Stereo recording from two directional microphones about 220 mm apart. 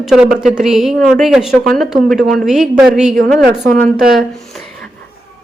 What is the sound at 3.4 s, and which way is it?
Speech, 45° right (ahead or behind).